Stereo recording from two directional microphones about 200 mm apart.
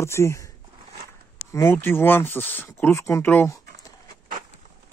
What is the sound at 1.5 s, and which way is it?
Speech, 15° left (ahead or behind).